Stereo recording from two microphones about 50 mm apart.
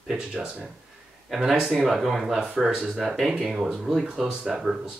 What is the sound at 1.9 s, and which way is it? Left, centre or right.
Speech, centre.